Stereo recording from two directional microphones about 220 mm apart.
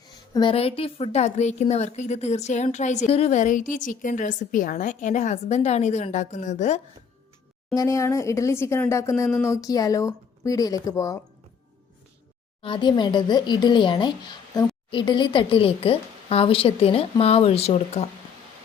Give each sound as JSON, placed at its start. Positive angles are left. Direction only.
{"t": 0.3, "sound": "a woman's voice", "side_deg": 25}
{"t": 7.7, "sound": "speech", "side_deg": 15}
{"t": 12.6, "sound": "a woman's voice", "side_deg": 20}